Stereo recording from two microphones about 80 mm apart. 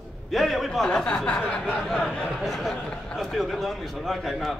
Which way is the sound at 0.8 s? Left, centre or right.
Centre.